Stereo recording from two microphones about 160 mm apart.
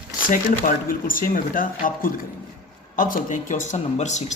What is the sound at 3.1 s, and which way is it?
Speech, 55° left (ahead or behind).